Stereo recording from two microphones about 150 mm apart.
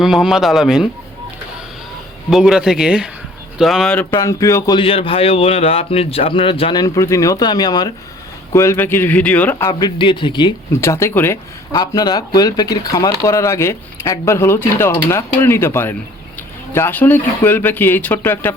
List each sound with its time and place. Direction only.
0.0 s a man's voice: centre (ahead or behind)
2.3 s a man's voice: 5° right (ahead or behind)
4.2 s speech: 20° left (ahead or behind)
4.8 s a man's voice: 40° left (ahead or behind)
6.8 s speech: 20° left (ahead or behind)
9.6 s a man's voice: 30° left (ahead or behind)
10.8 s speech: 20° left (ahead or behind)
11.7 s speech: 30° left (ahead or behind); by 18.5 s 10° left (ahead or behind)